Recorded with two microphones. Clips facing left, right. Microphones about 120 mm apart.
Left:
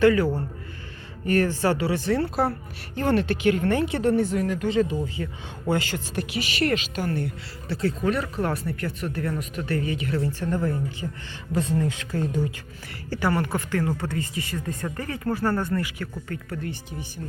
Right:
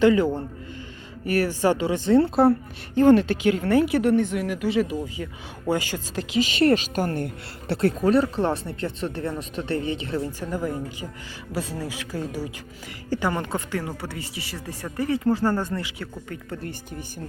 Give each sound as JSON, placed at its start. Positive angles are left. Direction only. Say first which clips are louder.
{"t": 0.0, "sound": "speech", "louder": "right 1 dB", "side_deg": -20}
{"t": 1.2, "sound": "a woman's voice", "louder": "even", "side_deg": -10}
{"t": 7.7, "sound": "speech", "louder": "right 4 dB", "side_deg": -65}
{"t": 8.0, "sound": "a woman's voice", "louder": "right 6 dB", "side_deg": -30}